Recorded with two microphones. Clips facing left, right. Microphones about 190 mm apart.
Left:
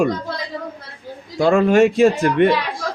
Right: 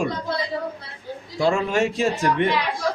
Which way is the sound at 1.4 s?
55° left (ahead or behind).